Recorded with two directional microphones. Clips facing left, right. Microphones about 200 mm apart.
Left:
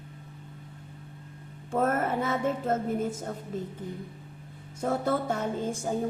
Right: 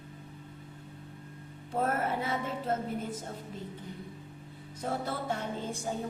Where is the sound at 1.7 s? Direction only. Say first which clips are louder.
Left 4 dB; 45° left (ahead or behind).